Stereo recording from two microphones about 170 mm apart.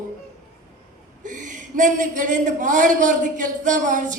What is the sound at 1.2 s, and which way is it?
A man's voice, 50° right (ahead or behind).